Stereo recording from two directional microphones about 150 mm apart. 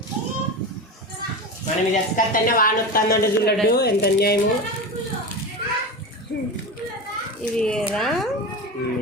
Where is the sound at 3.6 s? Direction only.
90° left.